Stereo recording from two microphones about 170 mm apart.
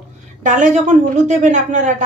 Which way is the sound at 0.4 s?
50° right (ahead or behind).